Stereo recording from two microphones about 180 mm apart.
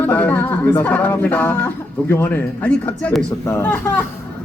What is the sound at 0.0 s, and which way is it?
A man's voice, 10° left (ahead or behind).